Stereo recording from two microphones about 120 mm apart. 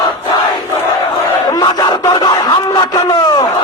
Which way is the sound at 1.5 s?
35° left (ahead or behind).